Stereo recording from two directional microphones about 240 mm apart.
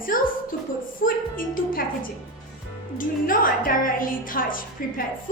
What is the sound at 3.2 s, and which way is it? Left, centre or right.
A woman's voice, left.